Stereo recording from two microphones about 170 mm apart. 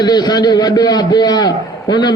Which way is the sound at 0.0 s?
25° left (ahead or behind).